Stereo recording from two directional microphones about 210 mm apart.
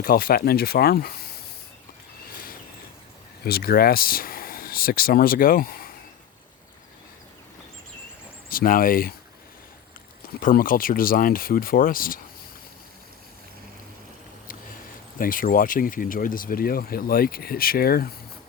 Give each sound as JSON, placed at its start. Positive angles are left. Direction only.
{"t": 0.0, "sound": "speech", "side_deg": 45}
{"t": 3.4, "sound": "speech", "side_deg": 45}
{"t": 8.4, "sound": "speech", "side_deg": 45}
{"t": 10.4, "sound": "speech", "side_deg": 40}
{"t": 15.2, "sound": "speech", "side_deg": 40}